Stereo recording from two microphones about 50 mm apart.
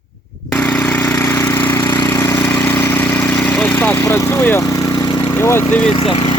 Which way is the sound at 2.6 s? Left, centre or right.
Left.